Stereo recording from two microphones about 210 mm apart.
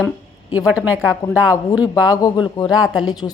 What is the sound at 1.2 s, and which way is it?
A woman's voice, 15° left (ahead or behind).